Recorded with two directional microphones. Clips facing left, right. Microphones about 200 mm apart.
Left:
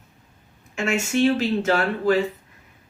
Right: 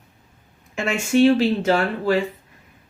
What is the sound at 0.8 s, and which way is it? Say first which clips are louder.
Speech: right 4 dB; 35° right (ahead or behind).